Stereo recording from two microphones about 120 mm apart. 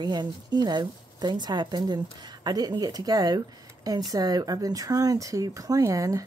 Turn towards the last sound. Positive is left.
turn(degrees=-30)  # may be behind; listen again after turning